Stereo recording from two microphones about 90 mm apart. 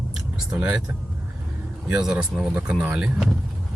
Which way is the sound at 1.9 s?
10° right (ahead or behind).